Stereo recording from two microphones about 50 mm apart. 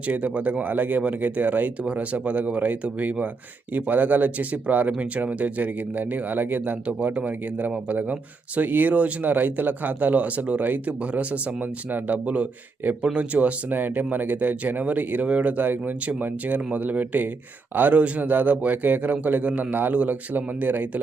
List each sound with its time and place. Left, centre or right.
0.1 s speech: right
1.8 s speech: right
6.8 s speech: right
13.7 s speech: right
20.3 s speech: right